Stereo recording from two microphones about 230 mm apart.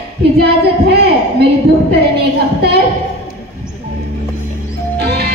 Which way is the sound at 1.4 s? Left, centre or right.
Right.